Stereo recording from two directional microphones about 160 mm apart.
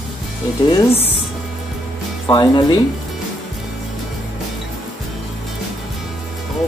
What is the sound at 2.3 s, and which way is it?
Speech, 25° left (ahead or behind).